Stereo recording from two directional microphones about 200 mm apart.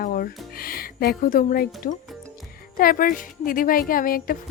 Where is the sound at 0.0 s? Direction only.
45° left (ahead or behind).